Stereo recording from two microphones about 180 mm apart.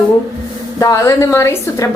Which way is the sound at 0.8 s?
20° left (ahead or behind).